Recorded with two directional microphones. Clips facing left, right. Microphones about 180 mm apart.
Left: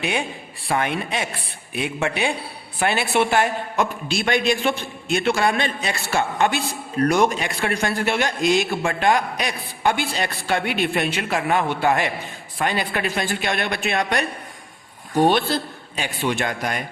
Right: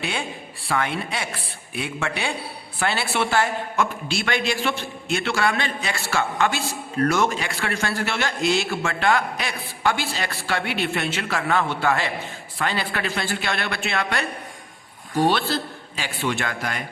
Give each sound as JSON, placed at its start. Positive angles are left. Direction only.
{"t": 0.0, "sound": "a man's voice", "side_deg": 15}